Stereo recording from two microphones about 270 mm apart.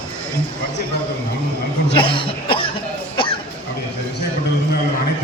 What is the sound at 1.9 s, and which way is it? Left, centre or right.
Chuckle, centre.